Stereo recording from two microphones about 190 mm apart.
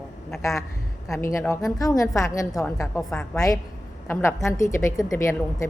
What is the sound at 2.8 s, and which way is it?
Speech, 5° left (ahead or behind).